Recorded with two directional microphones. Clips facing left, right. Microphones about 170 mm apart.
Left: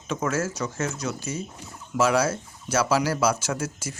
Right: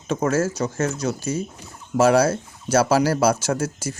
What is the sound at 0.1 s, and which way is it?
Speech, 35° right (ahead or behind).